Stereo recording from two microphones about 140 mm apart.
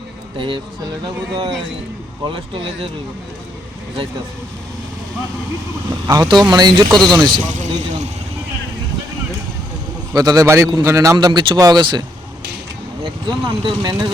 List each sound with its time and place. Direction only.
0.3 s speech: 35° right (ahead or behind)
2.2 s speech: 40° right (ahead or behind)
5.9 s a man's voice: 30° right (ahead or behind)
7.5 s speech: 60° right (ahead or behind)
10.2 s a man's voice: 25° right (ahead or behind)
13.2 s speech: 30° right (ahead or behind)